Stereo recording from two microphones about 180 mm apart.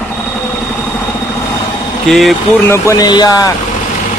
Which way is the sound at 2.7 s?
20° left (ahead or behind).